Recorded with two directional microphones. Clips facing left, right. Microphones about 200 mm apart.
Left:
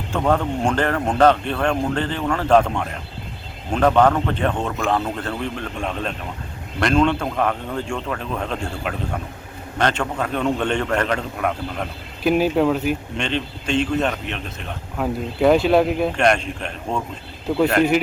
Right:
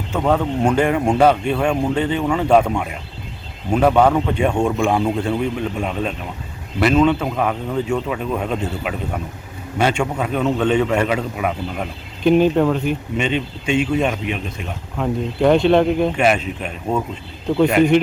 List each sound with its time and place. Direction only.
0.1 s a man's voice: 5° right (ahead or behind)
12.2 s a man's voice: 5° left (ahead or behind)
13.1 s speech: 5° right (ahead or behind)
14.9 s a man's voice: 5° left (ahead or behind)